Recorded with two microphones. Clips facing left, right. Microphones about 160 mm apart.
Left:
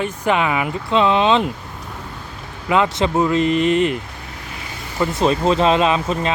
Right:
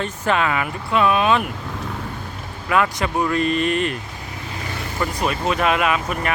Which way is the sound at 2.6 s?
20° left (ahead or behind).